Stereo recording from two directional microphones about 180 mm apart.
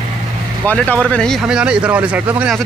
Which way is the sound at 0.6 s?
10° left (ahead or behind).